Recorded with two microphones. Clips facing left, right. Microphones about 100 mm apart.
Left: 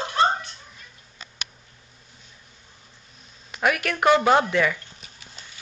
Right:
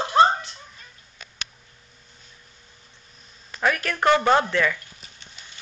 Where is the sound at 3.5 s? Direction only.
10° left (ahead or behind).